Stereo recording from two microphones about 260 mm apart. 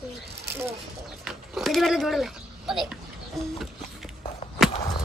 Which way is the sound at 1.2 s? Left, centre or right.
Centre.